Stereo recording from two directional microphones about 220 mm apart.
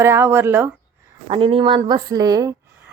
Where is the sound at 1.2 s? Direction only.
25° right (ahead or behind).